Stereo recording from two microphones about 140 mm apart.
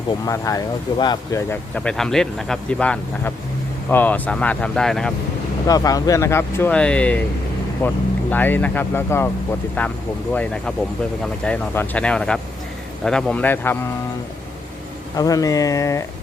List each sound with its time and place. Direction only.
0.3 s speech: 25° left (ahead or behind)
1.7 s speech: 5° left (ahead or behind)
5.6 s speech: 25° left (ahead or behind)
6.7 s speech: 5° left (ahead or behind)
15.1 s speech: 25° left (ahead or behind)